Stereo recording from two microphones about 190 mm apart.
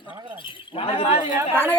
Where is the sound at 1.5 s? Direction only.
10° left (ahead or behind).